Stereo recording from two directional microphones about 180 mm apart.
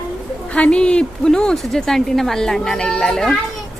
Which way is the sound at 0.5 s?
5° left (ahead or behind).